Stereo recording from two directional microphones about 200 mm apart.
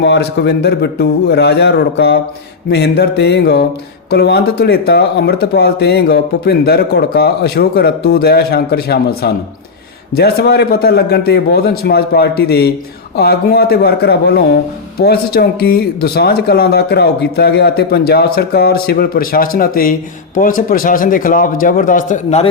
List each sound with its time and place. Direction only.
0.0 s a man's voice: 60° left (ahead or behind); by 22.4 s 35° left (ahead or behind)